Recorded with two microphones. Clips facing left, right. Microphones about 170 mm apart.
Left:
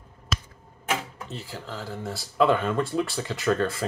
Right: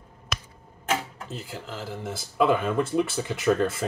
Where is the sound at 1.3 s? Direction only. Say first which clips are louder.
Even; centre (ahead or behind).